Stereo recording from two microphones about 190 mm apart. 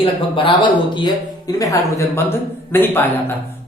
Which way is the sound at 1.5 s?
15° left (ahead or behind).